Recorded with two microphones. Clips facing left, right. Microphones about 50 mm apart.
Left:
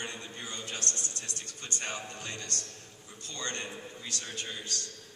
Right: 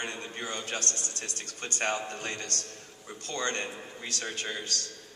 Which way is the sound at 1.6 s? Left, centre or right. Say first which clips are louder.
Right 7 dB; right.